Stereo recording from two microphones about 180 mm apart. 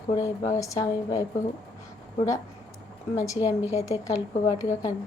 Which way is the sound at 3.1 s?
20° left (ahead or behind).